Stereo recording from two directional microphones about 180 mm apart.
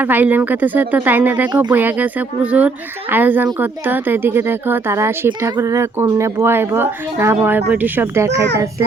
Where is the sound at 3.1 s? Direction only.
10° right (ahead or behind).